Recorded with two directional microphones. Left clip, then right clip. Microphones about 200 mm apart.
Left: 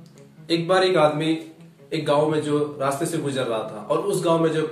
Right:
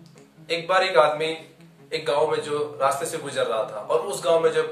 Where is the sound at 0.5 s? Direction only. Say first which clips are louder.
Left 2 dB; 15° right (ahead or behind).